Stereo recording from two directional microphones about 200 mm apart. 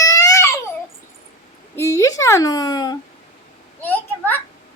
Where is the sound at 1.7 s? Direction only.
15° left (ahead or behind).